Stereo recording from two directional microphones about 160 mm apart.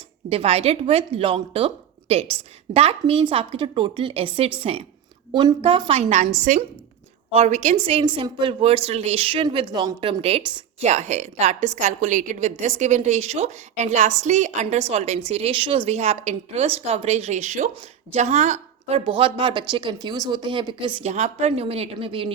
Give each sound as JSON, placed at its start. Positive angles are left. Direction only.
{"t": 0.3, "sound": "a woman's voice", "side_deg": -40}
{"t": 10.8, "sound": "a woman's voice", "side_deg": -45}
{"t": 21.0, "sound": "a woman's voice", "side_deg": -45}